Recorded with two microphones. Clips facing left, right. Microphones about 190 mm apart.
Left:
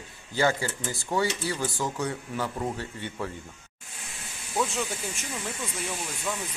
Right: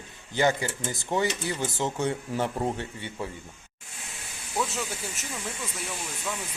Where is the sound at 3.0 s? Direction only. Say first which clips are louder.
Left 1 dB; 15° right (ahead or behind).